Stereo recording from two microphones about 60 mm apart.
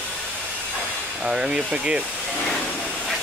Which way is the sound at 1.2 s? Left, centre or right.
Centre.